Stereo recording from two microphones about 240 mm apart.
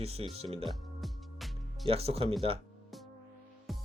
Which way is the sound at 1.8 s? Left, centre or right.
Right.